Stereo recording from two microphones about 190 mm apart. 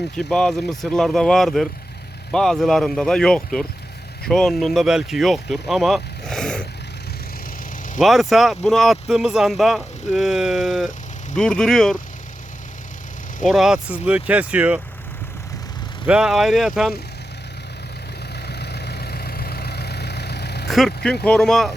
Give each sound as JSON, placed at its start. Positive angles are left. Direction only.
{"t": 0.2, "sound": "speech", "side_deg": 5}
{"t": 7.9, "sound": "speech", "side_deg": 0}
{"t": 13.4, "sound": "speech", "side_deg": 0}
{"t": 16.0, "sound": "speech", "side_deg": -5}
{"t": 18.4, "sound": "vehicle", "side_deg": 60}
{"t": 20.7, "sound": "speech", "side_deg": 0}